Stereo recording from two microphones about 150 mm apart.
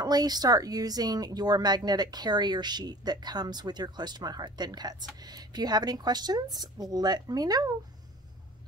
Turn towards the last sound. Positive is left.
turn(degrees=-25)  # may be behind; listen again after turning